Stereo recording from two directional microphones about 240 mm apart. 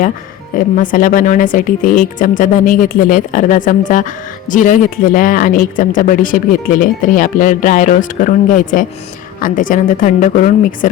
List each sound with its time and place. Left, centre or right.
0.5 s speech: left